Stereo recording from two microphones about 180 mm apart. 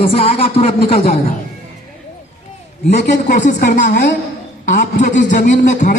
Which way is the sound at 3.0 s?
45° left (ahead or behind).